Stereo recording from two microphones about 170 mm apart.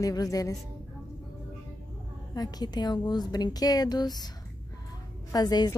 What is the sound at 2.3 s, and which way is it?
A woman's voice, 25° left (ahead or behind).